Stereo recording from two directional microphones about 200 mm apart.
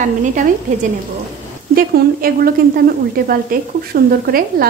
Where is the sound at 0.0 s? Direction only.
40° right (ahead or behind).